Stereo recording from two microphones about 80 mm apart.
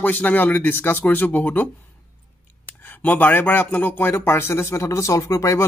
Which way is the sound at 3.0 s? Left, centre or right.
Left.